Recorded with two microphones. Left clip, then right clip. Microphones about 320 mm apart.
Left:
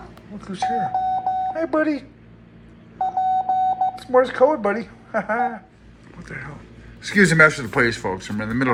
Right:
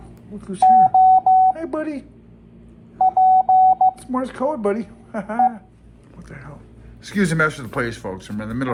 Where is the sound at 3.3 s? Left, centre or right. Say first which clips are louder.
Right 7 dB; right.